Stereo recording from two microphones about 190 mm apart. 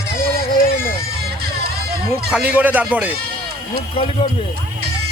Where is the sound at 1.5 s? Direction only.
55° right (ahead or behind).